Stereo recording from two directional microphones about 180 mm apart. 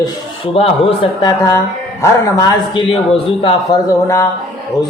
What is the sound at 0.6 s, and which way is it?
Speech, 30° left (ahead or behind).